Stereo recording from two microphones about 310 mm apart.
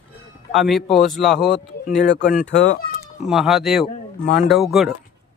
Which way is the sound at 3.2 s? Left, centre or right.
Centre.